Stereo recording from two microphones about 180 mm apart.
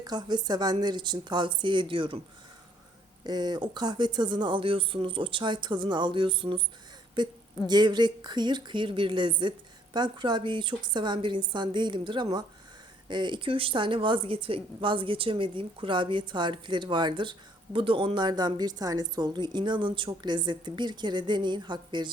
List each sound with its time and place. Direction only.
0.0 s a woman's voice: 25° right (ahead or behind)
3.2 s a woman's voice: 25° right (ahead or behind)